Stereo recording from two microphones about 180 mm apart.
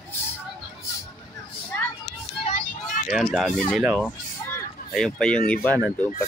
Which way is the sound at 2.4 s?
40° left (ahead or behind).